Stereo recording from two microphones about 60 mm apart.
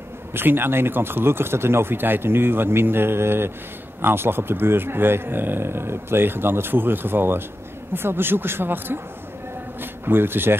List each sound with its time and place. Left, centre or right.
0.3 s speech: right